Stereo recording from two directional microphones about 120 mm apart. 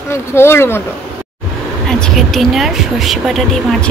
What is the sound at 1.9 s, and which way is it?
Speech, 5° left (ahead or behind).